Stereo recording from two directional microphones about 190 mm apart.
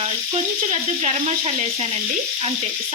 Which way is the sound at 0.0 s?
30° right (ahead or behind).